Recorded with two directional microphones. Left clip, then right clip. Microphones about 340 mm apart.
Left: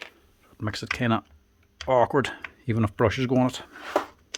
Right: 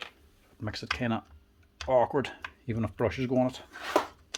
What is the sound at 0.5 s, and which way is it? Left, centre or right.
Speech, centre.